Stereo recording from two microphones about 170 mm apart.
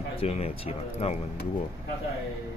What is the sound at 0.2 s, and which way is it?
Speech, 35° left (ahead or behind).